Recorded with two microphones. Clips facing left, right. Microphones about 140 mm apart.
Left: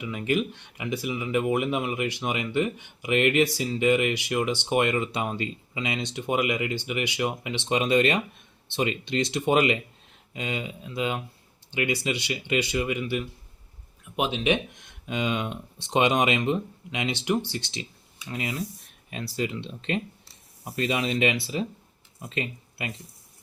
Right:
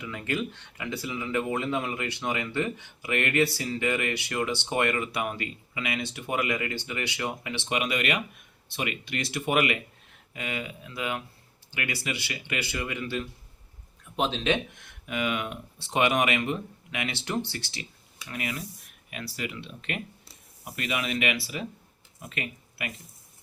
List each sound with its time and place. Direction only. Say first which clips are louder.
0.0 s speech: left 5 dB; 15° left (ahead or behind)